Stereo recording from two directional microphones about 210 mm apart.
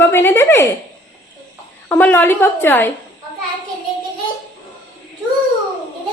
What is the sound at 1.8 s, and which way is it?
A woman's voice, 10° left (ahead or behind).